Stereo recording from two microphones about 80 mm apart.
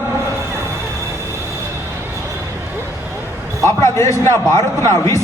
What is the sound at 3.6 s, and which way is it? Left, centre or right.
A man's voice, left.